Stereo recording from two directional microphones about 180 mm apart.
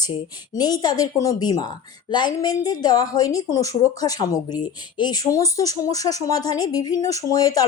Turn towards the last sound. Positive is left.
turn(degrees=20)  # may be behind; listen again after turning